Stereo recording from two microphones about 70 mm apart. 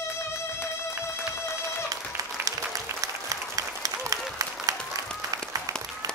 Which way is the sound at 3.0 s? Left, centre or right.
Right.